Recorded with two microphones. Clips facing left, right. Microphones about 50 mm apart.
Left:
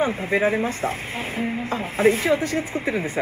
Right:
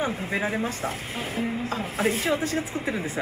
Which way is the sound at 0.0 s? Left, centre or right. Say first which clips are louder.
Left 6 dB; left.